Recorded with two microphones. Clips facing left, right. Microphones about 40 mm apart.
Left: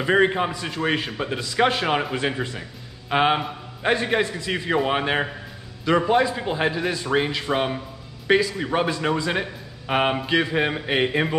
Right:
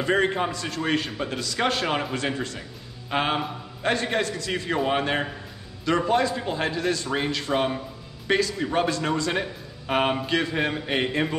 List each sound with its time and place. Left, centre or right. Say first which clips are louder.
0.0 s a man's voice: left 3 dB; centre